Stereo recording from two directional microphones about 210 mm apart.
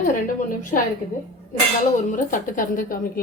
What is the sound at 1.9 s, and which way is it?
Speech, 40° left (ahead or behind).